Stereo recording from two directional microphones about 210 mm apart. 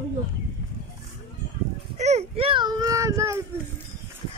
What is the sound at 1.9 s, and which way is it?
Speech, 30° right (ahead or behind).